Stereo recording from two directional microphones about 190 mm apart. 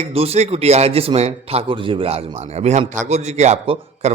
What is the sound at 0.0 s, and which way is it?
A man's voice, 30° right (ahead or behind).